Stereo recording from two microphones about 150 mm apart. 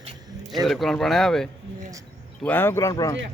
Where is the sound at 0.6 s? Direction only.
Centre (ahead or behind); by 3.2 s 20° left (ahead or behind).